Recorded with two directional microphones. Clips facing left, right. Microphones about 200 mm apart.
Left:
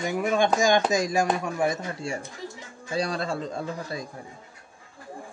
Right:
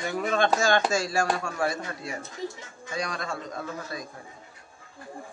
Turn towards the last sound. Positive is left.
turn(degrees=30)  # may be behind; listen again after turning